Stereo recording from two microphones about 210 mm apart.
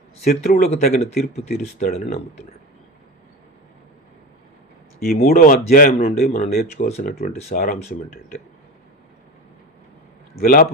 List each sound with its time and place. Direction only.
0.3 s speech: 40° left (ahead or behind)
4.9 s speech: 45° left (ahead or behind)
6.8 s speech: 35° left (ahead or behind)
10.4 s speech: 45° left (ahead or behind)